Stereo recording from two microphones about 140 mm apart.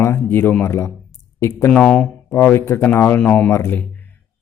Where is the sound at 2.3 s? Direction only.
20° left (ahead or behind).